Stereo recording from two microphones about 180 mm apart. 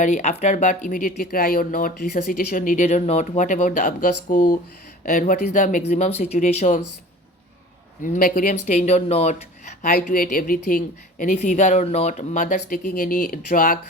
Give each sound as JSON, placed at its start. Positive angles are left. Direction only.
{"t": 0.0, "sound": "speech", "side_deg": 40}
{"t": 8.0, "sound": "speech", "side_deg": 50}